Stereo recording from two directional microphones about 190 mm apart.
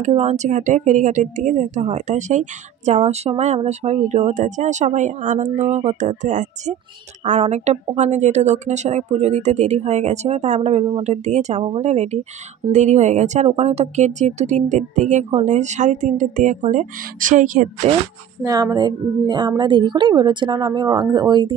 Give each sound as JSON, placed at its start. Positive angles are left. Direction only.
{"t": 0.0, "sound": "speech", "side_deg": -35}
{"t": 18.4, "sound": "a woman's voice", "side_deg": -20}